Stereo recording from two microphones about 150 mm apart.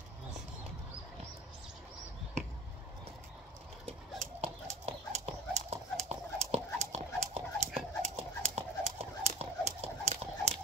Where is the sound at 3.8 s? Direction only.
45° right (ahead or behind).